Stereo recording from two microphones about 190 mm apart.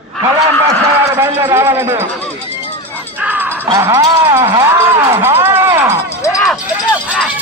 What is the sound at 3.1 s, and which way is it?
Music, 10° right (ahead or behind).